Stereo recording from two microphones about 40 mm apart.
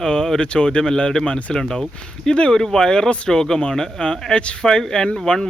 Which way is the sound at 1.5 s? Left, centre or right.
Centre.